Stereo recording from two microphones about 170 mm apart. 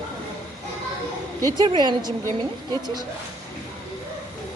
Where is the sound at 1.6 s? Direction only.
25° right (ahead or behind).